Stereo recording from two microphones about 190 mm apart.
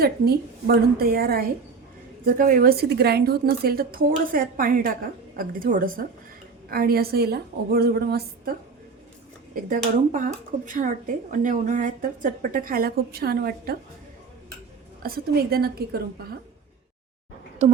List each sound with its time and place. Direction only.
0.0 s a woman's voice: 55° right (ahead or behind)
9.6 s speech: 45° right (ahead or behind)
15.0 s a woman's voice: 55° right (ahead or behind)
17.6 s speech: 35° right (ahead or behind)